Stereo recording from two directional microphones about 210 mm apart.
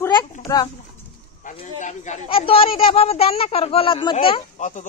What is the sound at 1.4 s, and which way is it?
Speech, 35° left (ahead or behind).